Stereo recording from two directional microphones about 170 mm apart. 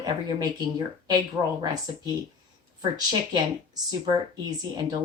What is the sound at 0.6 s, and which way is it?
Speech, 20° right (ahead or behind).